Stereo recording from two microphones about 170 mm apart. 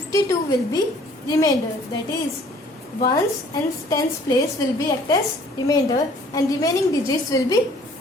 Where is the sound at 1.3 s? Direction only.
20° left (ahead or behind).